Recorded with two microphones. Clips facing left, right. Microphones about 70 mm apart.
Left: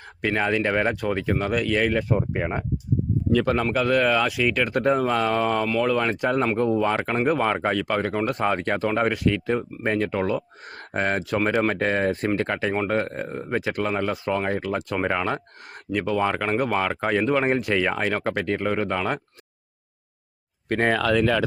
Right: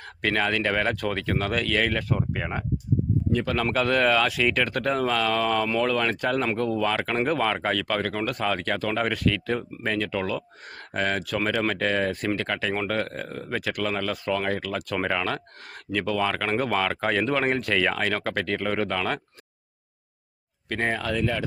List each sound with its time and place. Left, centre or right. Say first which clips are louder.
0.2 s speech: left 2 dB; centre
3.6 s speech: left 1 dB; centre
4.7 s speech: left 3 dB; left
20.7 s speech: left 5 dB; left
20.9 s speech: left 6 dB; left